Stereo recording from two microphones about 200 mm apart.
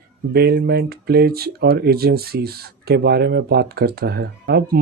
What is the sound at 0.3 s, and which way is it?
Speech, 50° right (ahead or behind).